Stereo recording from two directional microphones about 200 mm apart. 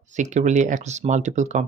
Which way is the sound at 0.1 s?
35° right (ahead or behind).